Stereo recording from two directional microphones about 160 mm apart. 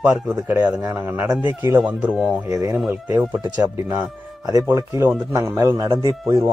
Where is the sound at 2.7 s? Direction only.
Centre (ahead or behind).